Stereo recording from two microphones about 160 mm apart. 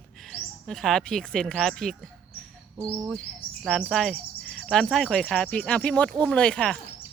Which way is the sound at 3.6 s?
Centre (ahead or behind).